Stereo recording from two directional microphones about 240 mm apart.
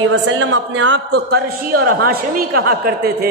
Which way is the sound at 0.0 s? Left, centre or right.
Right.